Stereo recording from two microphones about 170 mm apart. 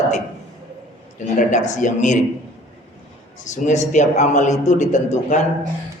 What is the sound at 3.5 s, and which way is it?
A man's voice, 45° left (ahead or behind).